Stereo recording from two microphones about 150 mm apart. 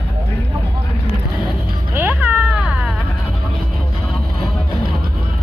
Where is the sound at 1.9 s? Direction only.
10° right (ahead or behind).